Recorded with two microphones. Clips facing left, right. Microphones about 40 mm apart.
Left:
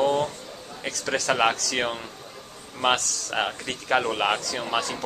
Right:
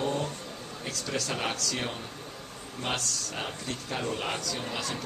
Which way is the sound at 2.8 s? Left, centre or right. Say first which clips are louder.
Left 9 dB; left.